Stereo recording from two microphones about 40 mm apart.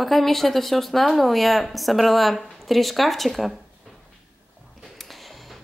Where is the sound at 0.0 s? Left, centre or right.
Centre.